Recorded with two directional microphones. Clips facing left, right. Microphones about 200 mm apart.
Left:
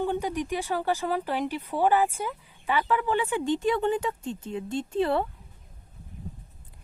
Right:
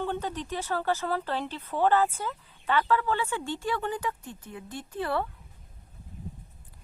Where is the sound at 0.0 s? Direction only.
10° left (ahead or behind).